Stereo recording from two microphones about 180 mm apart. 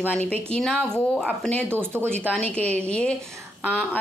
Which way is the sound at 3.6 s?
5° right (ahead or behind).